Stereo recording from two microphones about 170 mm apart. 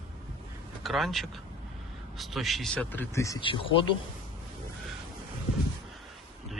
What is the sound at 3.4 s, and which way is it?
Speech, 30° left (ahead or behind).